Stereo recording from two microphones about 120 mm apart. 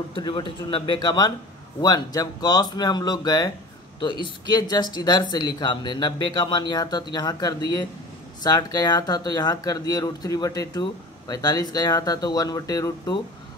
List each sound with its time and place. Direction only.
0.1 s a man's voice: 45° left (ahead or behind)